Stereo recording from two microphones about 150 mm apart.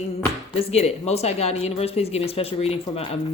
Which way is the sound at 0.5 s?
45° left (ahead or behind).